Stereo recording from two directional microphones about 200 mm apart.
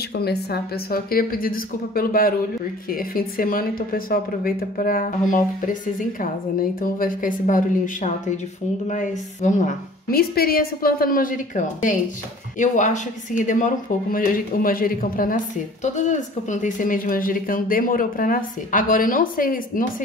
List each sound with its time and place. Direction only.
0.1 s speech: 50° left (ahead or behind)